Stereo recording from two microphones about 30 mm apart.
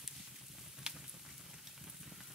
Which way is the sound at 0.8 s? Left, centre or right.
Centre.